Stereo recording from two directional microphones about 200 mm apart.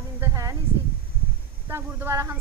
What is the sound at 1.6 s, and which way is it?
Speech, 15° right (ahead or behind).